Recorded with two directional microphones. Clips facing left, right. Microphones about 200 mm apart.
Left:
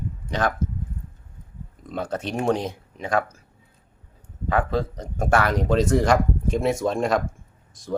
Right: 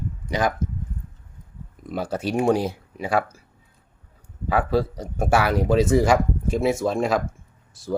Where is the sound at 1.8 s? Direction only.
10° right (ahead or behind).